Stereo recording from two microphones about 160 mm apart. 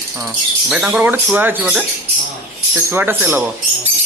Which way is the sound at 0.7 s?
5° right (ahead or behind).